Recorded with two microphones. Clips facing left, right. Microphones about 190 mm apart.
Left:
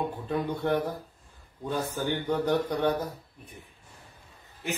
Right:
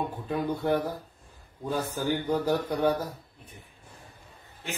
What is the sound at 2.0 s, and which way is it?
A man's voice, 10° right (ahead or behind).